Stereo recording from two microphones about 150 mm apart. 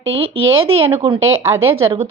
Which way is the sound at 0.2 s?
40° right (ahead or behind).